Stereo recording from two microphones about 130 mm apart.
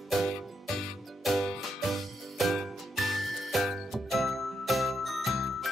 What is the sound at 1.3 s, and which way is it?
Music, centre (ahead or behind).